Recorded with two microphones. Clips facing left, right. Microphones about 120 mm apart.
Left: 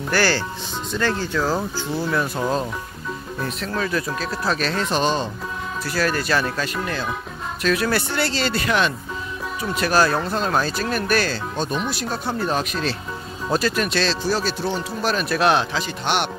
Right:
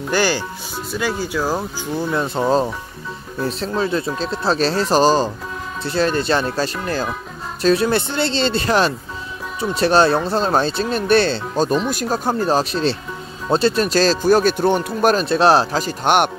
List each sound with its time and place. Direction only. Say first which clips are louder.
0.1 s speech: right 2 dB; 15° right (ahead or behind); by 15.1 s 55° right (ahead or behind)
15.1 s speech: right 2 dB; 30° right (ahead or behind); by 16.3 s 45° right (ahead or behind)